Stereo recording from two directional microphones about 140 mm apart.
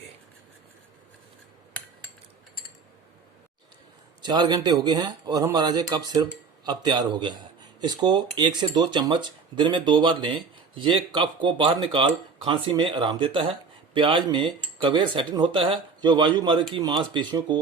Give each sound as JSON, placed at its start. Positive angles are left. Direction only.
{"t": 4.2, "sound": "speech", "side_deg": -30}